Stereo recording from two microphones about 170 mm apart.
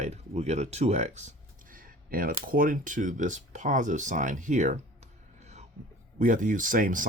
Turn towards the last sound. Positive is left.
turn(degrees=-50)  # may be behind; listen again after turning